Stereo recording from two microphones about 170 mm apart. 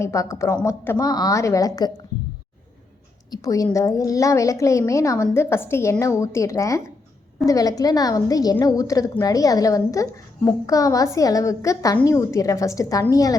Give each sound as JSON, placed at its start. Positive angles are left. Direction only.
{"t": 0.0, "sound": "a woman's voice", "side_deg": 15}
{"t": 3.3, "sound": "a woman's voice", "side_deg": 20}